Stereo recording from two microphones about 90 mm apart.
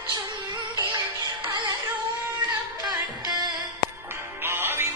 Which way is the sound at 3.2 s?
50° right (ahead or behind).